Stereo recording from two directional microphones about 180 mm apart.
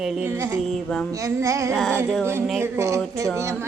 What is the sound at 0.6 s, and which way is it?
Speech, 5° left (ahead or behind).